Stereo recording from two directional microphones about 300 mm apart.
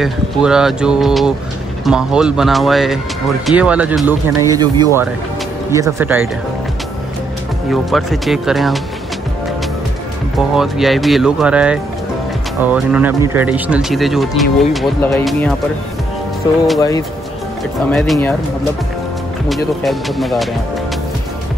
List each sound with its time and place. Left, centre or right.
0.0 s speech: centre
7.7 s speech: centre
10.5 s speech: centre
17.8 s speech: centre